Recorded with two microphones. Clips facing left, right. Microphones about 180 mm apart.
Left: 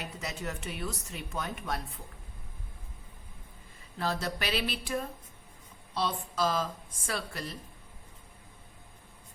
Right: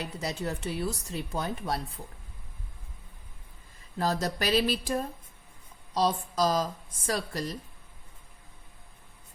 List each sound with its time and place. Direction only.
0.0 s speech: 35° right (ahead or behind)
3.9 s speech: 40° right (ahead or behind)